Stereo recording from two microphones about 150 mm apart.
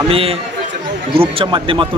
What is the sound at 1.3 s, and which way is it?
Speech, 35° right (ahead or behind).